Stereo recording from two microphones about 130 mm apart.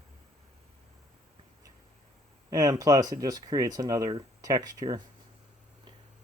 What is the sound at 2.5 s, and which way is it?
Speech, 30° right (ahead or behind).